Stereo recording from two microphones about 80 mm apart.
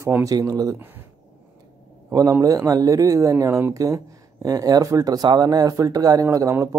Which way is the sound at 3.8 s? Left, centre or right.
Right.